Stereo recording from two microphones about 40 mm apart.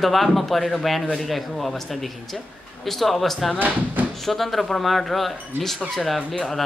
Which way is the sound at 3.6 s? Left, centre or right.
Right.